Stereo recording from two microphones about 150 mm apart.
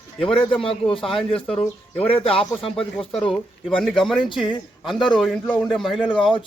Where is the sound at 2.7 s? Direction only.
5° left (ahead or behind).